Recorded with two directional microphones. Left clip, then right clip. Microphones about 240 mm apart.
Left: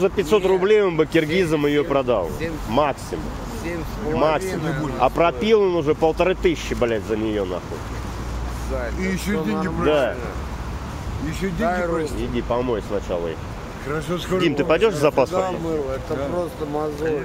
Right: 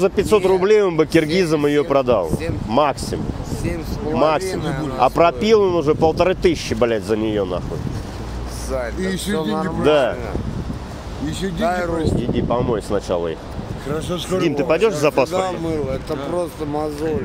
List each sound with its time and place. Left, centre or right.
0.0 s speech: right
4.1 s speech: centre
4.5 s a man's voice: right
4.9 s speech: right
9.0 s speech: centre
9.8 s speech: right
11.6 s a man's voice: right
12.4 s speech: right
13.9 s speech: centre